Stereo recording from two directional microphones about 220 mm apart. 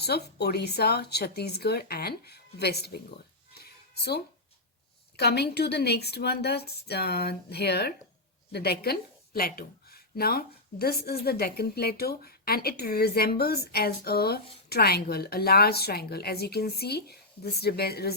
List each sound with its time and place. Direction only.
0.0 s a woman's voice: 45° left (ahead or behind)
3.5 s music: 45° left (ahead or behind)
5.1 s a woman's voice: 45° left (ahead or behind)